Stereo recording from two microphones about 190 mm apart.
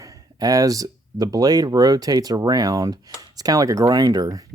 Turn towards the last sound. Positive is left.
turn(degrees=-20)  # may be behind; listen again after turning